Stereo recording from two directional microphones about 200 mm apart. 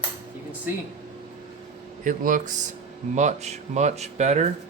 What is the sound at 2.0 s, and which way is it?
Speech, 40° right (ahead or behind).